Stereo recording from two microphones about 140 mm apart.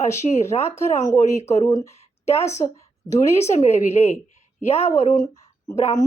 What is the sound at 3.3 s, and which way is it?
Speech, 50° left (ahead or behind).